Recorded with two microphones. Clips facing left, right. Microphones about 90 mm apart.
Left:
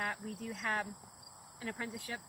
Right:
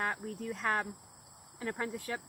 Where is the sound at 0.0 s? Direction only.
40° right (ahead or behind).